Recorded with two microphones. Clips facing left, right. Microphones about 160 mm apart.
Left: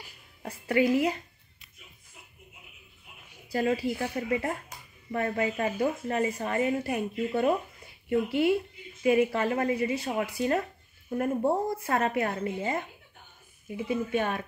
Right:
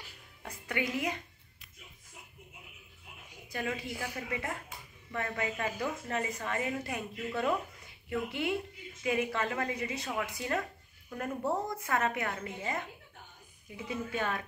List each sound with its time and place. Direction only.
0.4 s speech: 30° left (ahead or behind)
3.5 s speech: 30° left (ahead or behind)